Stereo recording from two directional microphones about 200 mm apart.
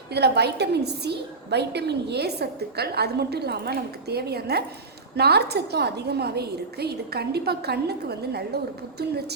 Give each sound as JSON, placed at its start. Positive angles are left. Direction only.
{"t": 0.1, "sound": "a woman's voice", "side_deg": -55}